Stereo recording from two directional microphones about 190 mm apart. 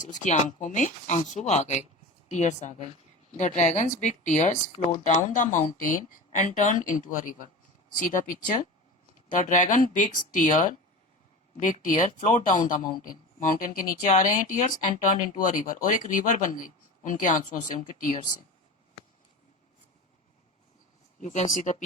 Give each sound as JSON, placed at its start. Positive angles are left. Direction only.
{"t": 0.0, "sound": "speech", "side_deg": 40}
{"t": 21.2, "sound": "speech", "side_deg": 40}